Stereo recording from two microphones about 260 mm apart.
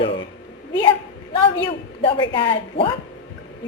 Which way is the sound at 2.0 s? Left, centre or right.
Centre.